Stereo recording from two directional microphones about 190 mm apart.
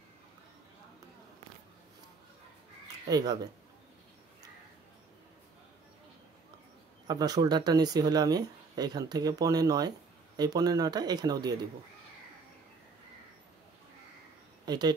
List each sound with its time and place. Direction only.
3.1 s speech: 20° right (ahead or behind)
7.1 s speech: 20° right (ahead or behind)
14.7 s speech: 20° right (ahead or behind)